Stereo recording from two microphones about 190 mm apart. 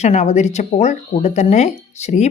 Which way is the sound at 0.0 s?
35° left (ahead or behind).